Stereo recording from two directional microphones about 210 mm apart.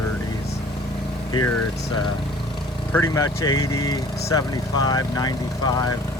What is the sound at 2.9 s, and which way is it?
Speech, 15° left (ahead or behind).